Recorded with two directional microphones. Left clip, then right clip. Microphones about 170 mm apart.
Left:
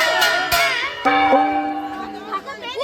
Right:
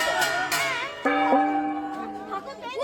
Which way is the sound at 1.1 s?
60° right (ahead or behind).